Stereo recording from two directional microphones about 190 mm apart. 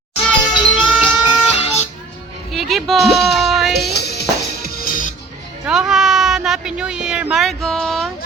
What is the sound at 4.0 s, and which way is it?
Music, 60° left (ahead or behind).